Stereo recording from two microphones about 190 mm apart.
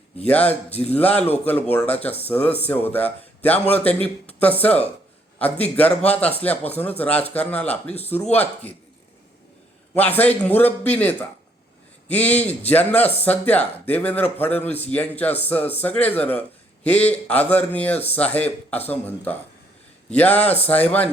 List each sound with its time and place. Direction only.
0.3 s a man's voice: 10° left (ahead or behind)
9.9 s a man's voice: 10° left (ahead or behind)
17.9 s speech: 30° left (ahead or behind)
18.2 s a man's voice: 10° left (ahead or behind)